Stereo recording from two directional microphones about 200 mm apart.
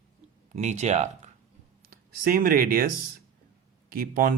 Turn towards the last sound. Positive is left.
turn(degrees=-45)  # may be behind; listen again after turning